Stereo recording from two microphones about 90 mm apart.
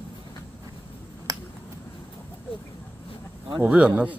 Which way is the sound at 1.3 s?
45° right (ahead or behind).